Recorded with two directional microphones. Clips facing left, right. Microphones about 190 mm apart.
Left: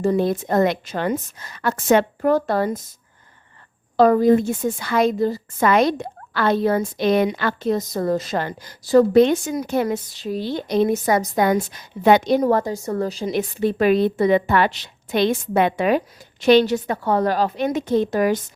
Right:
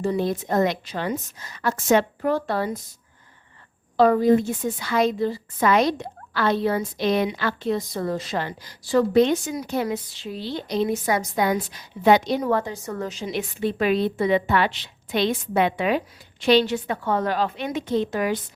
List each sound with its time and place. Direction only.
0.0 s a woman's voice: 50° left (ahead or behind)
3.9 s a woman's voice: 45° left (ahead or behind)